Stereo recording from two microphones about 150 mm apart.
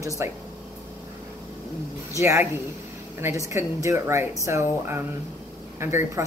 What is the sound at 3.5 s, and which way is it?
Speech, 20° right (ahead or behind).